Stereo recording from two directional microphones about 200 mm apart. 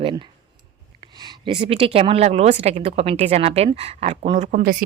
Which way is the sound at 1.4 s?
25° right (ahead or behind).